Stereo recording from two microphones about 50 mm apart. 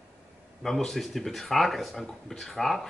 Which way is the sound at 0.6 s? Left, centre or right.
Centre.